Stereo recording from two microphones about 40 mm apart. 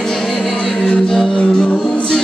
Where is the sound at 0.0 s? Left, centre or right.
Centre.